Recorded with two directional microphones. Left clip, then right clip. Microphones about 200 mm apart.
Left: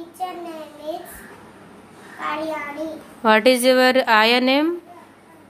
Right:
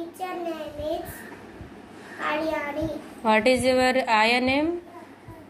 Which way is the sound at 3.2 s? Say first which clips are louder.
Left 5 dB; 35° left (ahead or behind).